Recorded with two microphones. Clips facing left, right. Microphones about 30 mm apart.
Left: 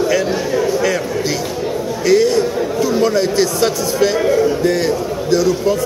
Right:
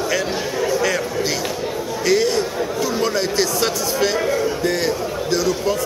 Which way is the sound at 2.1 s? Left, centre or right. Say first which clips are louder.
Left 5 dB; centre.